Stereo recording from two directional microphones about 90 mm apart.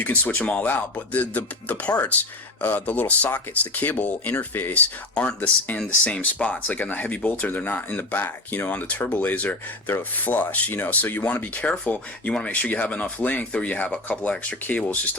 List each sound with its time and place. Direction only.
0.0 s speech: 20° left (ahead or behind)